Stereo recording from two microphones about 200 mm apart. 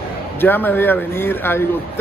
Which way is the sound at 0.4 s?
10° left (ahead or behind).